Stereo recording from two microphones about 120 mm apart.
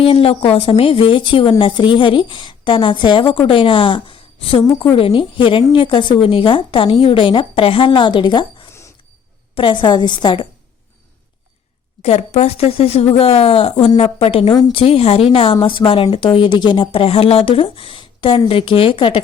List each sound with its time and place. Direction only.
0.0 s a woman's voice: 50° left (ahead or behind)
4.6 s a woman's voice: 35° left (ahead or behind)
4.9 s a woman's voice: 45° left (ahead or behind)
9.6 s a woman's voice: 40° left (ahead or behind)
12.0 s a woman's voice: 65° left (ahead or behind); by 19.2 s 45° left (ahead or behind)